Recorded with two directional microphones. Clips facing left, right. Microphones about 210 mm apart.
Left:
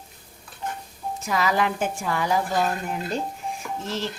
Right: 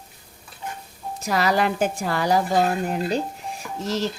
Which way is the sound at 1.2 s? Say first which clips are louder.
Right 2 dB; 35° right (ahead or behind).